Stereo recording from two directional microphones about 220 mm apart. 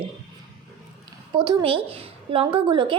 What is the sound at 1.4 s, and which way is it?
Speech, 20° right (ahead or behind).